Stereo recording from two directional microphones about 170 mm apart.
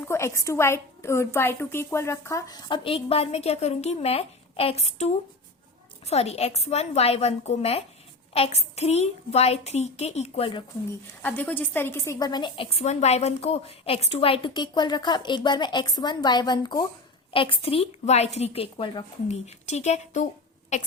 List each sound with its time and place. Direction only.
0.1 s a woman's voice: 15° left (ahead or behind); by 10.6 s 35° left (ahead or behind)
11.2 s a woman's voice: 10° left (ahead or behind); by 20.2 s 40° left (ahead or behind)